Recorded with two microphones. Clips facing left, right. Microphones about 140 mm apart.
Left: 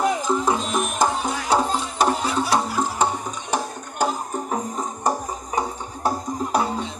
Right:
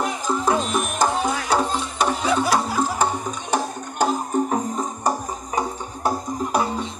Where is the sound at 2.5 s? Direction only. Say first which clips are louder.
Right 1 dB; 20° left (ahead or behind).